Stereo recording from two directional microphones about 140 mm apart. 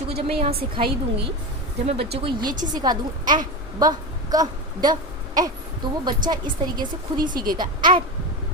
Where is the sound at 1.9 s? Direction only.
45° right (ahead or behind).